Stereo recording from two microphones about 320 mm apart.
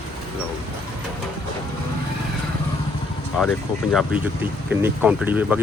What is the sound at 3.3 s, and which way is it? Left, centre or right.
Speech, centre.